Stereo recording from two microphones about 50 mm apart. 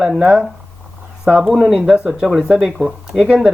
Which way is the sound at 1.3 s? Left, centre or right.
Centre.